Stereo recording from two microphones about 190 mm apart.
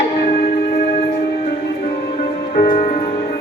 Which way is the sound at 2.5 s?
45° left (ahead or behind).